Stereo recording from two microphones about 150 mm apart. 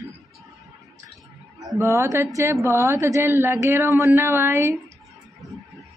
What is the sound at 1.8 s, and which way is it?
A woman's voice, 20° right (ahead or behind).